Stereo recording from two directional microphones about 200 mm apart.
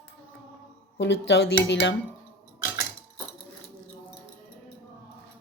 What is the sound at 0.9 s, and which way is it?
Speech, 65° left (ahead or behind).